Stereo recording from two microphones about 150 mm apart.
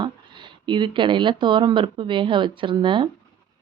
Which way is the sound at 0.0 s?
30° right (ahead or behind).